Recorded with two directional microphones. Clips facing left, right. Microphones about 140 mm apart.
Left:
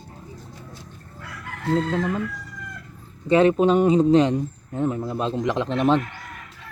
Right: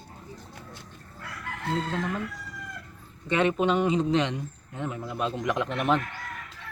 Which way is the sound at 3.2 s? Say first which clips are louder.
Left 7 dB; 35° left (ahead or behind).